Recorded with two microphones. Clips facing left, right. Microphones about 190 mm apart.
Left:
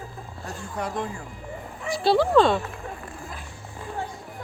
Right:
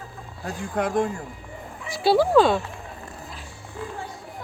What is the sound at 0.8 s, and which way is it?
Speech, 50° right (ahead or behind).